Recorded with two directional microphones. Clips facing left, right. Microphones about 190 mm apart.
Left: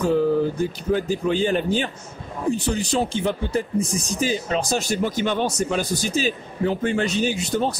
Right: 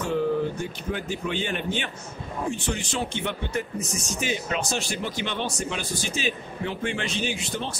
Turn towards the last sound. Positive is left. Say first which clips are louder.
# left 8 dB
turn(degrees=40)  # may be behind; listen again after turning